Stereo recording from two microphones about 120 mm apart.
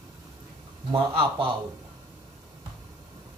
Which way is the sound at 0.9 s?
50° right (ahead or behind).